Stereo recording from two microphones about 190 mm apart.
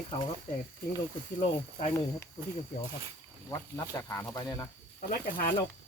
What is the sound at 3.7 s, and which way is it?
Speech, 15° left (ahead or behind).